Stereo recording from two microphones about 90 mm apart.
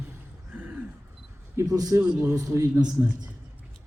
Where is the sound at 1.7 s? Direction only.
45° right (ahead or behind).